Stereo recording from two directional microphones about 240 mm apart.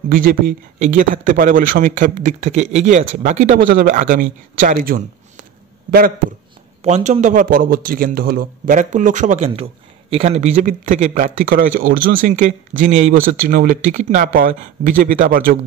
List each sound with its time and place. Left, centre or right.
0.1 s a man's voice: right